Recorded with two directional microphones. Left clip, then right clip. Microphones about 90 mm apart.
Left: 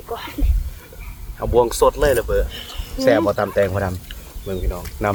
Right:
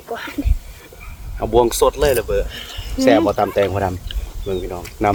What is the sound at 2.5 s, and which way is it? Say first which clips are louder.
Speech: right 2 dB; 55° right (ahead or behind).